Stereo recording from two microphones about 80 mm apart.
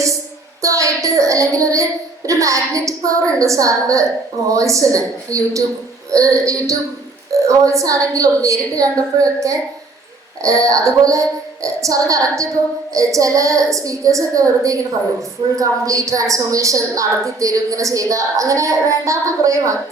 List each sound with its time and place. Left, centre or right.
0.6 s child singing: right
3.4 s a woman's voice: right